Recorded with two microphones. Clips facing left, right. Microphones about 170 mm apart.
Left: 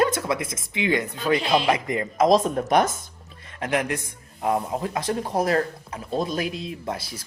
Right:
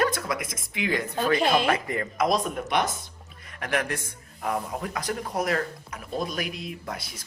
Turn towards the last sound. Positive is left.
turn(degrees=30)  # may be behind; listen again after turning